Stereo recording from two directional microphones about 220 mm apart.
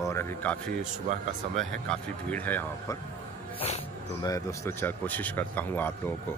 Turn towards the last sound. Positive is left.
turn(degrees=10)  # may be behind; listen again after turning